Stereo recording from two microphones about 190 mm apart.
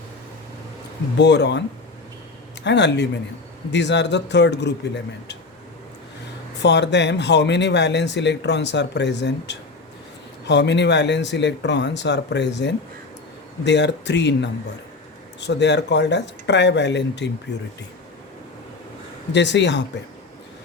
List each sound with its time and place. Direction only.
1.2 s speech: 65° left (ahead or behind)
2.6 s speech: 65° left (ahead or behind)
6.6 s speech: 65° left (ahead or behind)
19.3 s speech: 65° left (ahead or behind)